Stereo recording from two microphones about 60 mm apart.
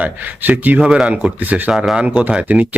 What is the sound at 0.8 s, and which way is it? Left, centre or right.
Speech, centre.